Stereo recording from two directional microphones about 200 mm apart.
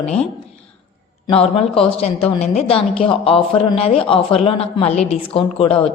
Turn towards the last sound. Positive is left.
turn(degrees=25)  # may be behind; listen again after turning